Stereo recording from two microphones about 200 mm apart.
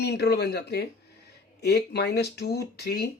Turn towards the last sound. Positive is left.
turn(degrees=50)  # may be behind; listen again after turning